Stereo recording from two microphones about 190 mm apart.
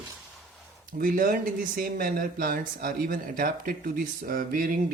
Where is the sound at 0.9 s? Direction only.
50° right (ahead or behind).